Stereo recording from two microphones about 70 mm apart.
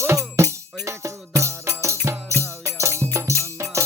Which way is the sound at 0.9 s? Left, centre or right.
Right.